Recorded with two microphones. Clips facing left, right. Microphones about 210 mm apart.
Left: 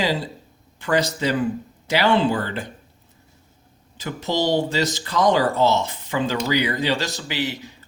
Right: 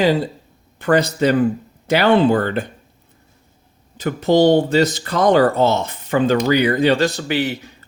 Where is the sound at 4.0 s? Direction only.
55° right (ahead or behind).